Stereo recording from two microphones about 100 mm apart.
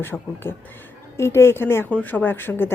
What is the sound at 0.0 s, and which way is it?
A woman's voice, 20° left (ahead or behind).